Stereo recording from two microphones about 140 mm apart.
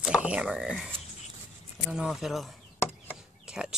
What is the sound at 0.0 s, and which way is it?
Speech, 10° right (ahead or behind).